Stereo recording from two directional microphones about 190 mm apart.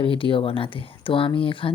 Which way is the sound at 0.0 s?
25° left (ahead or behind).